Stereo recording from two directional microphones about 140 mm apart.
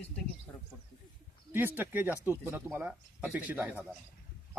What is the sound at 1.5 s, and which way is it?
Speech, 15° right (ahead or behind).